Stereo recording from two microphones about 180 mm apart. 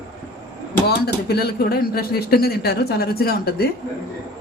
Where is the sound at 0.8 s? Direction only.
60° left (ahead or behind).